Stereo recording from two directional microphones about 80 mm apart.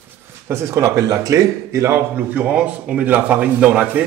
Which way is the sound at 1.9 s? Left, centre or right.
Right.